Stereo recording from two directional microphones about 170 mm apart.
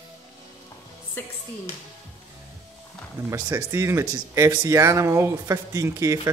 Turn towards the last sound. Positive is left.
turn(degrees=-15)  # may be behind; listen again after turning